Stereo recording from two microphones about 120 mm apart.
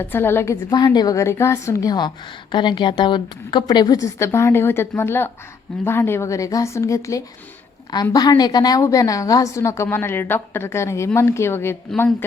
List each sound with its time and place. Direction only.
0.0 s a woman's voice: 20° left (ahead or behind)
0.7 s a woman's voice: 35° left (ahead or behind)